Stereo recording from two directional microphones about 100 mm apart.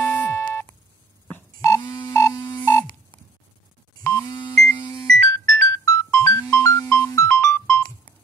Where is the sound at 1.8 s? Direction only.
45° left (ahead or behind).